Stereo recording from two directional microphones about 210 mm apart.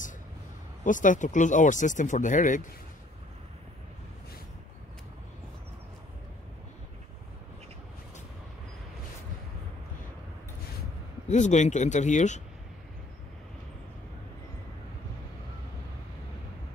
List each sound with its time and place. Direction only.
0.8 s speech: 40° left (ahead or behind)
11.2 s speech: 35° left (ahead or behind)